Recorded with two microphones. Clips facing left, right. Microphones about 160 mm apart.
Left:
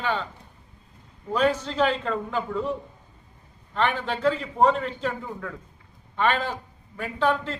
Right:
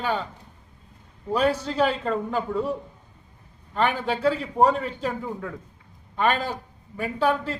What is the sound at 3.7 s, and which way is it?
A man's voice, 10° right (ahead or behind).